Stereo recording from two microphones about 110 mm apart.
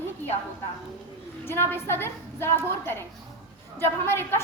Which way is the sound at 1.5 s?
20° left (ahead or behind).